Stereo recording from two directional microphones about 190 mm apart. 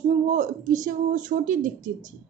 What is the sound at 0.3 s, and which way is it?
A woman's voice, 40° right (ahead or behind).